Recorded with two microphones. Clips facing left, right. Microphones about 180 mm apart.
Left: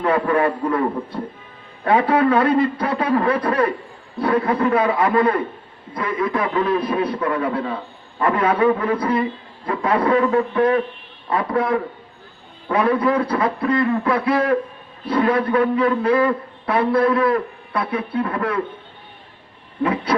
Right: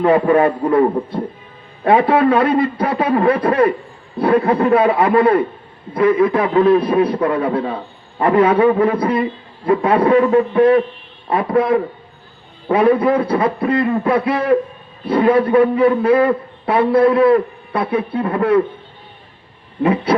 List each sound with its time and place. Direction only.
0.0 s a man's voice: 25° right (ahead or behind)
19.8 s a man's voice: 25° right (ahead or behind)